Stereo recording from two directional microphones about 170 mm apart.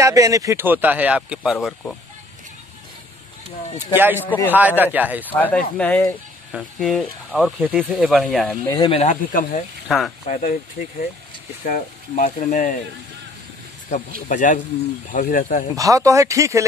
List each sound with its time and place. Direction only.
0.0 s speech: 20° right (ahead or behind); by 2.0 s 5° left (ahead or behind)
3.7 s speech: 15° right (ahead or behind)
4.2 s a man's voice: 10° left (ahead or behind)
4.6 s speech: 10° right (ahead or behind)
5.3 s a man's voice: 10° left (ahead or behind)
8.6 s speech: 20° left (ahead or behind)
8.9 s speech: 45° left (ahead or behind)
9.8 s speech: centre (ahead or behind)
10.2 s speech: 50° left (ahead or behind)
14.3 s speech: 50° left (ahead or behind)
15.7 s speech: 20° right (ahead or behind)